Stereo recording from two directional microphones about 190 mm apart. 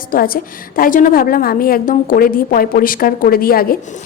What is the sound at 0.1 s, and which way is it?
A woman's voice, 50° left (ahead or behind).